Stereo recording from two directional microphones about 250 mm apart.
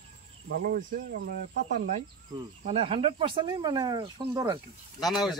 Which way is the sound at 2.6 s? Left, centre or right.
Right.